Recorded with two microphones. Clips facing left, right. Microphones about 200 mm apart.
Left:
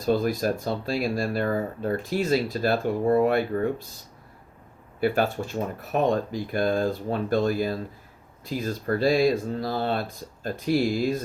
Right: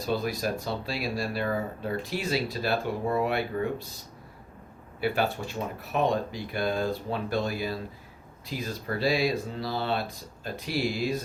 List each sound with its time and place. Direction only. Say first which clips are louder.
0.0 s speech: left 5 dB; 45° left (ahead or behind)
4.9 s speech: left 4 dB; 45° left (ahead or behind)